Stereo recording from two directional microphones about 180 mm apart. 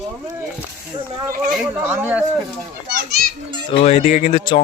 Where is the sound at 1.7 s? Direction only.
10° right (ahead or behind).